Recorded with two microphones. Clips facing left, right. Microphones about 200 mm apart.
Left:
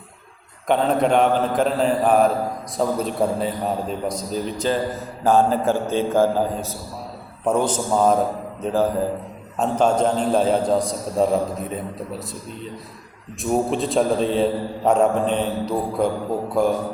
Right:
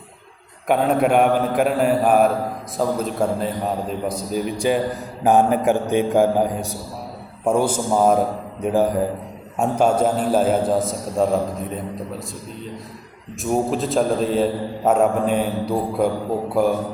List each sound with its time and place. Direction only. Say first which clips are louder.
0.7 s a man's voice: right 1 dB; 10° right (ahead or behind)
13.4 s a man's voice: even; centre (ahead or behind)